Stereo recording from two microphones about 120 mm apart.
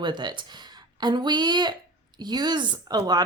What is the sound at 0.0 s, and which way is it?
A woman's voice, 35° right (ahead or behind).